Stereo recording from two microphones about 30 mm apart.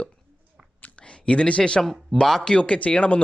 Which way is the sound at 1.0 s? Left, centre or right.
Left.